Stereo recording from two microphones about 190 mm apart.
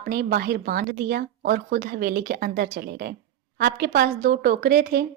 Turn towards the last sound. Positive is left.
turn(degrees=-50)  # may be behind; listen again after turning